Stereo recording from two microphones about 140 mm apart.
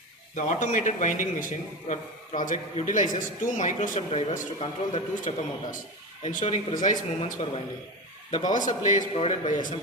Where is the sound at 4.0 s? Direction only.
45° left (ahead or behind).